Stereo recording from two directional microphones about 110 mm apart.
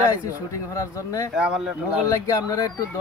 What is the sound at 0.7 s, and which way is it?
Speech, 30° left (ahead or behind).